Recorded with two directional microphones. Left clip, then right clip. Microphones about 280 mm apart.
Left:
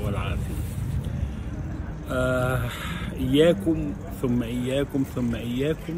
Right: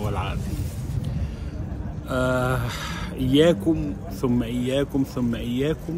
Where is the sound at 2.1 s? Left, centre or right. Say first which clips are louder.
Right 1 dB; centre.